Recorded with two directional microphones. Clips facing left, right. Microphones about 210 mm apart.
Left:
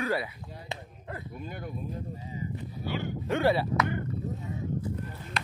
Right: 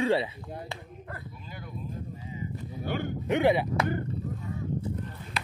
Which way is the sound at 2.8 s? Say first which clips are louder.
Right 2 dB; 50° right (ahead or behind).